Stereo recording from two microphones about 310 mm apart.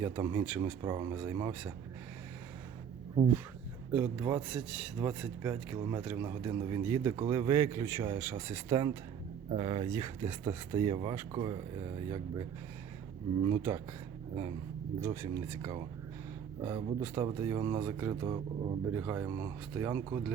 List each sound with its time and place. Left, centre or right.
0.0 s a man's voice: centre
3.9 s a man's voice: centre
13.5 s a man's voice: centre
14.9 s a man's voice: centre